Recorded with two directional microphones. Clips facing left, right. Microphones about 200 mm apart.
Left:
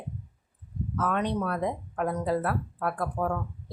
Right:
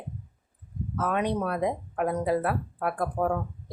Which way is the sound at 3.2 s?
25° right (ahead or behind).